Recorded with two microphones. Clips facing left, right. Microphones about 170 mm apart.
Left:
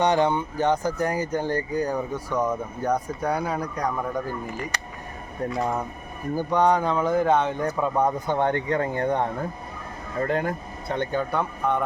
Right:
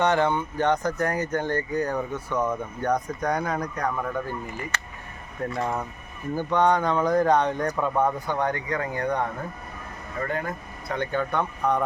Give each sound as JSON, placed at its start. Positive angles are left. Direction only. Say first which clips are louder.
{"t": 0.0, "sound": "speech", "louder": "left 1 dB", "side_deg": 15}
{"t": 5.5, "sound": "speech", "louder": "left 2 dB", "side_deg": 10}